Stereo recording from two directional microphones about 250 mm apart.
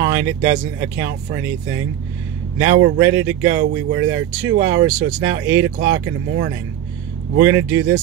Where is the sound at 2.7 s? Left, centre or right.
Right.